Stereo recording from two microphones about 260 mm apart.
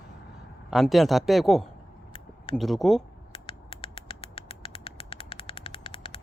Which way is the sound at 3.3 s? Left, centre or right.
Centre.